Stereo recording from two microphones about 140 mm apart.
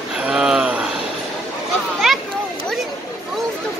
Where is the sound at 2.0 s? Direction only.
Centre (ahead or behind).